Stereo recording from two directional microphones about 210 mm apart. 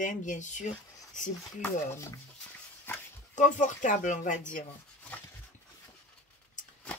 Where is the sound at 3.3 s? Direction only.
35° left (ahead or behind).